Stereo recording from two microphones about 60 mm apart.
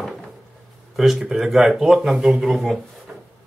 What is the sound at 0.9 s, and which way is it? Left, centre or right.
Speech, centre.